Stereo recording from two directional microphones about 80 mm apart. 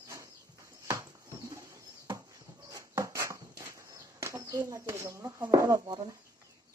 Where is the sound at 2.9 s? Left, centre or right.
Right.